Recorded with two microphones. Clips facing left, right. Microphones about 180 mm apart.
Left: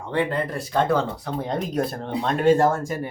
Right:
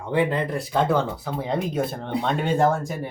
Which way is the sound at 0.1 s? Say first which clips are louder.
Right 2 dB; 5° right (ahead or behind).